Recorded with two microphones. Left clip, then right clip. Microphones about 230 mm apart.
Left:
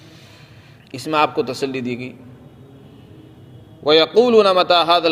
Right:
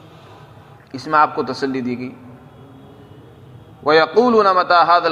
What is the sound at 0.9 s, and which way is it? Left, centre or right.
A man's voice, left.